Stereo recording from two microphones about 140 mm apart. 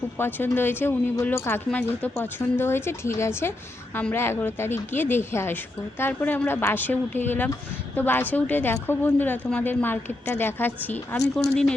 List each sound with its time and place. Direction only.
0.2 s a woman's voice: 15° left (ahead or behind)